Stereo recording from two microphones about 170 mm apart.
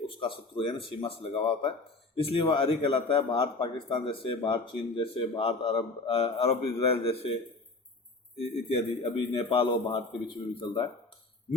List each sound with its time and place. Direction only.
0.0 s speech: 30° left (ahead or behind)
8.4 s speech: 35° left (ahead or behind)